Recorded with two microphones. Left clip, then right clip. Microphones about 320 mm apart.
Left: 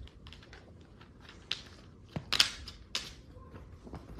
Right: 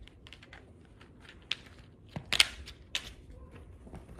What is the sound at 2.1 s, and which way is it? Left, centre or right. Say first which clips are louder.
Scissors: right 2 dB; centre.